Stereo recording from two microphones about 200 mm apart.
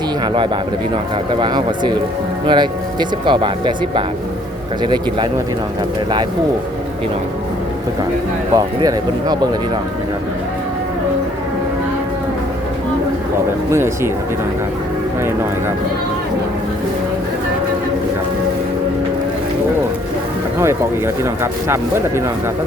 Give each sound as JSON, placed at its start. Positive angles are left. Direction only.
{"t": 1.4, "sound": "speech", "side_deg": -20}
{"t": 8.5, "sound": "speech", "side_deg": -20}
{"t": 13.7, "sound": "speech", "side_deg": -15}
{"t": 21.4, "sound": "speech", "side_deg": -15}